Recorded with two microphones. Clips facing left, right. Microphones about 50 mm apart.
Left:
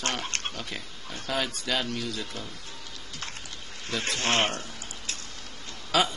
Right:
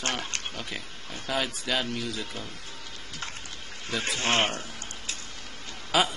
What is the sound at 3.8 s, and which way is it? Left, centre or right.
Speech, centre.